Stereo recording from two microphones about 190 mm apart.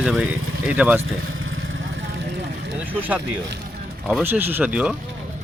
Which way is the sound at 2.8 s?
10° right (ahead or behind).